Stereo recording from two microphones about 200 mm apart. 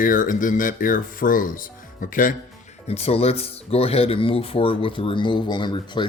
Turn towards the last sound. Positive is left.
turn(degrees=25)  # may be behind; listen again after turning